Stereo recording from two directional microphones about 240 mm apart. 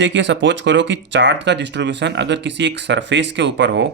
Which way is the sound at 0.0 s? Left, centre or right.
Right.